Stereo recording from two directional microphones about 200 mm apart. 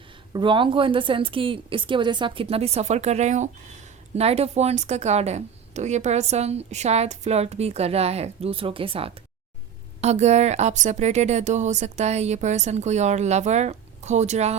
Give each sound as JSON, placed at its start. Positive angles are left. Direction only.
{"t": 0.3, "sound": "a woman's voice", "side_deg": -25}